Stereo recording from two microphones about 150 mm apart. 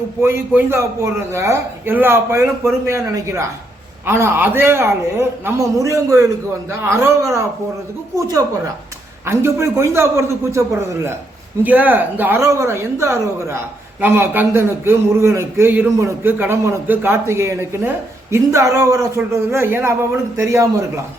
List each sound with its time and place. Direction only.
0.2 s a man's voice: 15° right (ahead or behind)